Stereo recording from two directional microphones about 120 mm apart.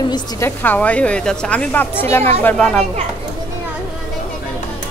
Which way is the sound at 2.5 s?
5° left (ahead or behind).